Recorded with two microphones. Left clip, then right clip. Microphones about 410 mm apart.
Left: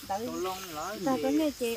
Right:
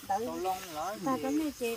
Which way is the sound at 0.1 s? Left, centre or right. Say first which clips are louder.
Right 1 dB; centre.